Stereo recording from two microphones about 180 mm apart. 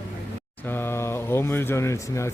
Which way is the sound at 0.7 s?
10° left (ahead or behind).